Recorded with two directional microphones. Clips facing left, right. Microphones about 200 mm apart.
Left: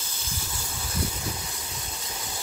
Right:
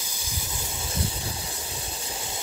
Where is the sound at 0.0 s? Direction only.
10° right (ahead or behind).